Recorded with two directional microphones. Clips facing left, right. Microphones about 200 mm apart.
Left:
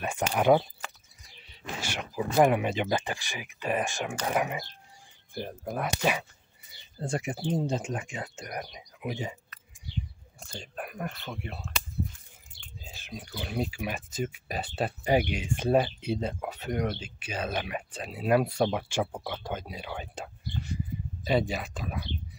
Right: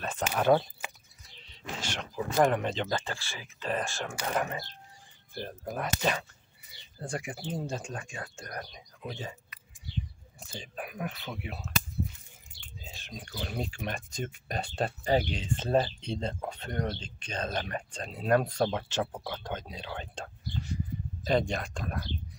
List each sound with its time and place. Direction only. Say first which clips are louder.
0.0 s speech: left 2 dB; 15° left (ahead or behind)
5.8 s speech: left 2 dB; 10° left (ahead or behind)
7.0 s speech: left 5 dB; 25° left (ahead or behind)
10.4 s speech: left 1 dB; centre (ahead or behind)
12.8 s speech: left 3 dB; 5° left (ahead or behind)